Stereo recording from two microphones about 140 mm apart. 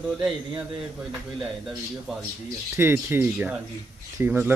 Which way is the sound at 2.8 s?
15° right (ahead or behind).